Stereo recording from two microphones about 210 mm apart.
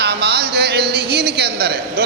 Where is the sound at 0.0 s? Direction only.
50° right (ahead or behind).